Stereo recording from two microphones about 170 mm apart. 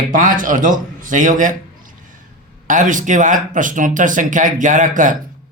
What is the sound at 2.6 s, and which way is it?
Speech, 50° right (ahead or behind).